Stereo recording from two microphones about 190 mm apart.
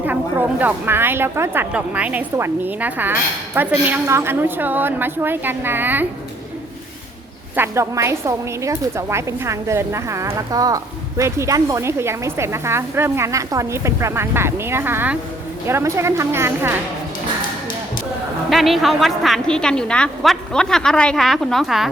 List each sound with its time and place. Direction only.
0.0 s a woman's voice: 10° right (ahead or behind)
7.5 s a woman's voice: 15° right (ahead or behind)
18.5 s a woman's voice: centre (ahead or behind)